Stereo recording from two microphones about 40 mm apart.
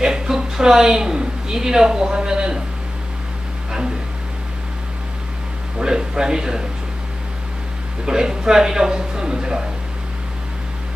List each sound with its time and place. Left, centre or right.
0.0 s a woman's voice: centre
3.7 s a sound: right
5.8 s a man's voice: centre
8.0 s a man's voice: centre